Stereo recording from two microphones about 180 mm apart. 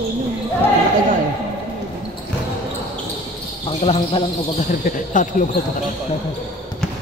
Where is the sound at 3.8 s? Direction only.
30° left (ahead or behind).